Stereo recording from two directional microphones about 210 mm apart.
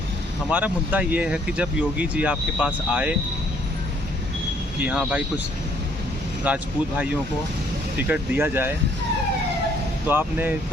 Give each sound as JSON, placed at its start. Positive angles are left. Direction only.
{"t": 0.5, "sound": "speech", "side_deg": -5}
{"t": 4.8, "sound": "speech", "side_deg": -5}
{"t": 6.5, "sound": "speech", "side_deg": -5}
{"t": 7.9, "sound": "speech", "side_deg": -10}
{"t": 10.1, "sound": "speech", "side_deg": -10}